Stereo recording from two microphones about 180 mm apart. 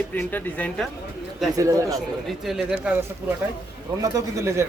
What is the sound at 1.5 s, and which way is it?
Speech, 20° right (ahead or behind).